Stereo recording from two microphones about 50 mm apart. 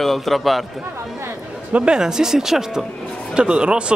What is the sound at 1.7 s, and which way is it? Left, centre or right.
Speech, right.